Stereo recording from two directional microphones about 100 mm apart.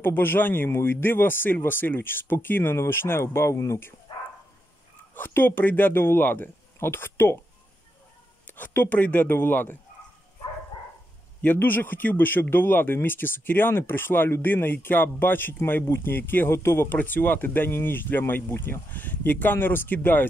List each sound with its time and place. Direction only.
0.0 s speech: 20° left (ahead or behind)
5.1 s speech: 20° left (ahead or behind)
8.5 s speech: 20° left (ahead or behind)
11.4 s speech: 20° left (ahead or behind)